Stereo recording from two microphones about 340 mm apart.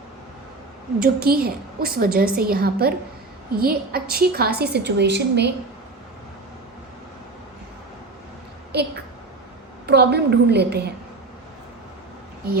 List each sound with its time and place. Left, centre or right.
1.0 s a woman's voice: right
8.7 s a woman's voice: right